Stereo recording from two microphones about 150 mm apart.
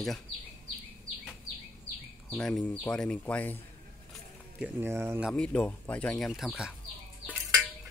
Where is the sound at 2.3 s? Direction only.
5° left (ahead or behind).